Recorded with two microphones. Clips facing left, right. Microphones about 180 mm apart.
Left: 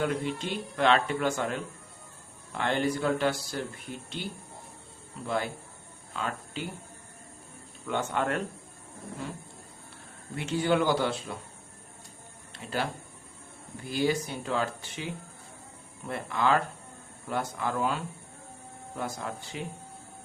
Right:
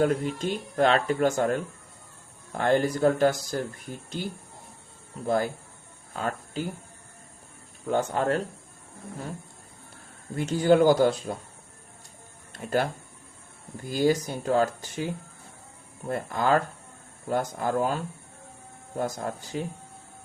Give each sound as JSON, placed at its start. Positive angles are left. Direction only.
{"t": 0.0, "sound": "speech", "side_deg": -45}
{"t": 7.9, "sound": "speech", "side_deg": -40}
{"t": 10.3, "sound": "speech", "side_deg": -40}
{"t": 12.5, "sound": "speech", "side_deg": -50}